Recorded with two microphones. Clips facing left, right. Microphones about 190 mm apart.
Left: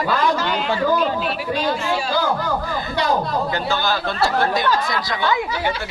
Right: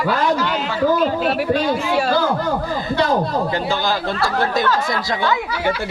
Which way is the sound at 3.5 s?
30° right (ahead or behind).